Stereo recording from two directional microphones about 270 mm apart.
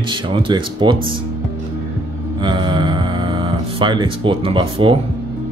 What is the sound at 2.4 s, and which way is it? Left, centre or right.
Music, centre.